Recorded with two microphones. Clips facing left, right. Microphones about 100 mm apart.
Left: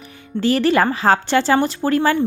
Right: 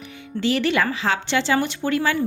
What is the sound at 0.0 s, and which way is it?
Speech, 40° left (ahead or behind).